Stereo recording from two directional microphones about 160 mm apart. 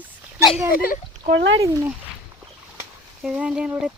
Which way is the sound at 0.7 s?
65° left (ahead or behind).